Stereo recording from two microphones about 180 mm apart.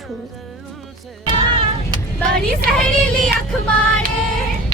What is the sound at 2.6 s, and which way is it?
Speech, 55° right (ahead or behind).